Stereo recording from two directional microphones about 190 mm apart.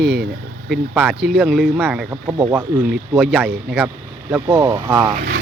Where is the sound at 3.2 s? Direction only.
5° right (ahead or behind).